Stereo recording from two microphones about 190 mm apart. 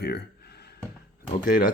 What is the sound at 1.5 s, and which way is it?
Speech, 50° left (ahead or behind).